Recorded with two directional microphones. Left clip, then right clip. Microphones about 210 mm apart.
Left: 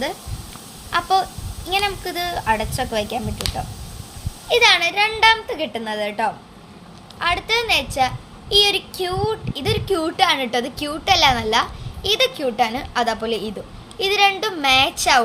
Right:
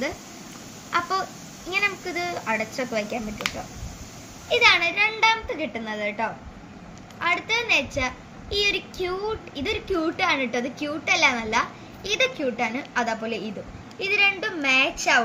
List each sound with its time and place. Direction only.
0.9 s a sound: 55° left (ahead or behind)
1.7 s a woman's voice: 55° left (ahead or behind)
4.4 s a woman's voice: 55° left (ahead or behind)